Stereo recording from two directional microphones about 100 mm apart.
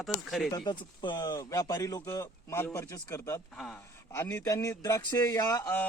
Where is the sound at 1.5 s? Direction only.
30° left (ahead or behind).